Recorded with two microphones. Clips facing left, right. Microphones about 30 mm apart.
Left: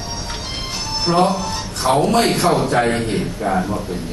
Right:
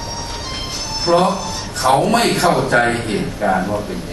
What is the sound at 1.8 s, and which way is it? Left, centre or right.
Speech, right.